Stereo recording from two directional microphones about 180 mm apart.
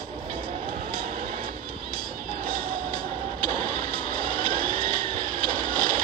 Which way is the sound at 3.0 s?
35° right (ahead or behind).